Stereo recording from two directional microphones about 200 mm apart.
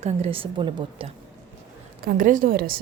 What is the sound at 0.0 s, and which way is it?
A woman's voice, 30° right (ahead or behind).